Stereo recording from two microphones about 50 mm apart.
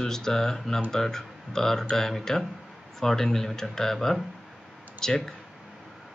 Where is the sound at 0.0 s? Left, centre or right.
Centre.